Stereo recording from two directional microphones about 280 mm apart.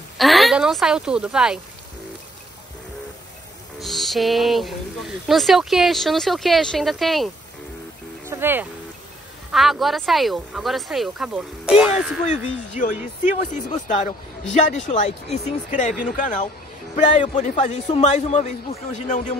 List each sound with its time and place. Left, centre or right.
0.2 s speech: centre
3.8 s speech: centre
8.3 s speech: centre
12.3 s speech: left